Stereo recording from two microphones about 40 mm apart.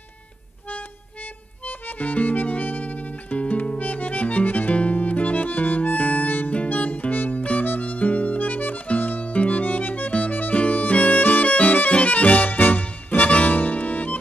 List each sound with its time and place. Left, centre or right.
1.7 s music: left
4.9 s harmonica: left
6.6 s music: left
7.6 s harmonica: left
10.6 s music: left